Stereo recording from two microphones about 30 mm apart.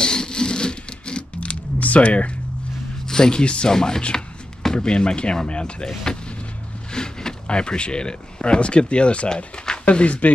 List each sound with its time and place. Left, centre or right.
0.0 s a sound: left
1.4 s camera: left
3.1 s speech: left
3.7 s speech: centre
4.8 s speech: left
6.9 s a sound: left
7.4 s speech: left